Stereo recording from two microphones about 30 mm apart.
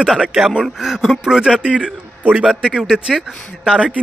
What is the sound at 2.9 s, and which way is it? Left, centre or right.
Speech, right.